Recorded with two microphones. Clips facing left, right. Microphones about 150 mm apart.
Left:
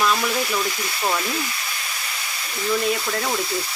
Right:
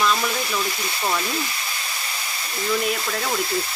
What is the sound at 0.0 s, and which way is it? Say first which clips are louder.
Frying: even; 5° left (ahead or behind).